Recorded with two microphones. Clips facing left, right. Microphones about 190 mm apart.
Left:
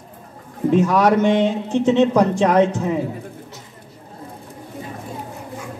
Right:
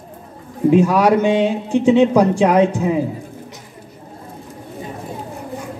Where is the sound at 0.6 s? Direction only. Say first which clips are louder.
Right 3 dB; 10° right (ahead or behind).